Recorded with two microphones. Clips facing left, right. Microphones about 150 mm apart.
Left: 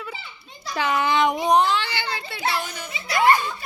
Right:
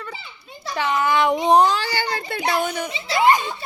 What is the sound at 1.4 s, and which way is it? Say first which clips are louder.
A child's voice: right 3 dB; 35° right (ahead or behind).